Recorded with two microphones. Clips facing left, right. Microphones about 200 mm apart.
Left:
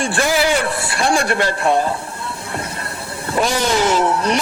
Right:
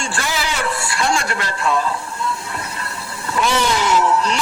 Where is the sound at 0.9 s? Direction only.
35° left (ahead or behind).